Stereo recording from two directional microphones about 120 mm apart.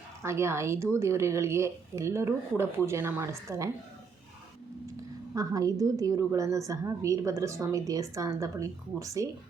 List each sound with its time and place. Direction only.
0.2 s a woman's voice: 25° right (ahead or behind)
4.9 s a woman's voice: 25° right (ahead or behind)